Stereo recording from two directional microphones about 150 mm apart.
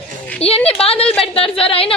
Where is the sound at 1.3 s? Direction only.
40° left (ahead or behind).